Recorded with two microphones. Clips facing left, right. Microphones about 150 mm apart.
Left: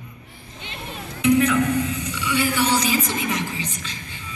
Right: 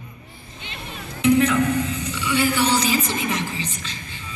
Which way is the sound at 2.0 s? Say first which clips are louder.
Right 2 dB; 30° right (ahead or behind).